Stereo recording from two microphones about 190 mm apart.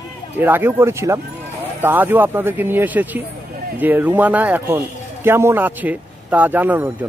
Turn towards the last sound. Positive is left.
turn(degrees=-10)  # may be behind; listen again after turning